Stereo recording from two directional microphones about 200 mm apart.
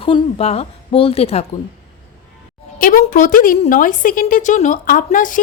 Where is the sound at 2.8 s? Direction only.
40° left (ahead or behind).